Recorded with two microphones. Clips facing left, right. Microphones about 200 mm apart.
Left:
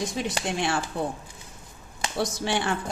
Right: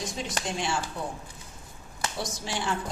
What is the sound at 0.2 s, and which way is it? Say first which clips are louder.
Speech: left 3 dB; 60° left (ahead or behind).